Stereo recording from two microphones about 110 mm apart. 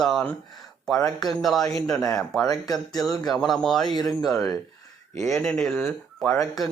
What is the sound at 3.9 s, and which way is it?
Speech, 40° left (ahead or behind).